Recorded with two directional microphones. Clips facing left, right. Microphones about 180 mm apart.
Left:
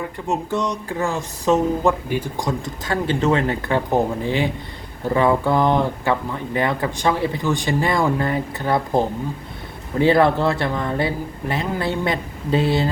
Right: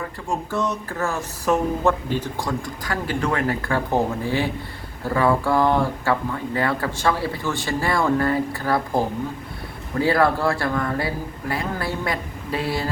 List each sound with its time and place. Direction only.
0.3 s speech: 20° left (ahead or behind)